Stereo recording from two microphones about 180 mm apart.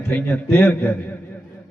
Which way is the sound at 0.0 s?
10° left (ahead or behind).